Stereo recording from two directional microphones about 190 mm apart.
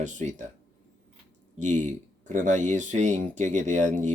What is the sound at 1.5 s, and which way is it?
Speech, 40° right (ahead or behind).